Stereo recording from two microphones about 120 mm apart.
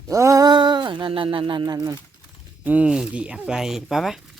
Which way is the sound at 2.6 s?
10° right (ahead or behind).